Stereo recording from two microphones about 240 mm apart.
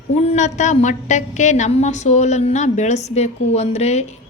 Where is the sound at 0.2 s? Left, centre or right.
Left.